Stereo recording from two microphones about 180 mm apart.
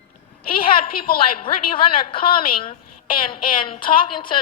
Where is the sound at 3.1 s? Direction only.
30° left (ahead or behind).